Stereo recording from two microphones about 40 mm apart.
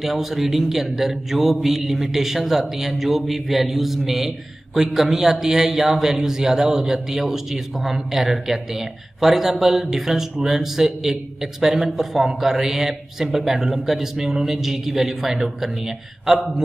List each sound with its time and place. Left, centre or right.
0.0 s a man's voice: centre
11.6 s a woman's voice: right
12.0 s a man's voice: centre